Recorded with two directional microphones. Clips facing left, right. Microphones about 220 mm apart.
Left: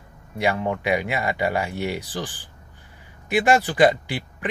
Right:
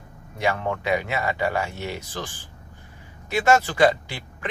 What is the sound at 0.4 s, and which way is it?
A man's voice, 15° left (ahead or behind).